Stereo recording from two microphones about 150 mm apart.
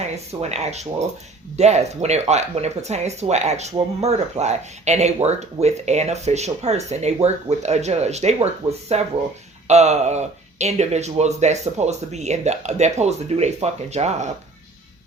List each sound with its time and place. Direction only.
0.0 s speech: 45° right (ahead or behind)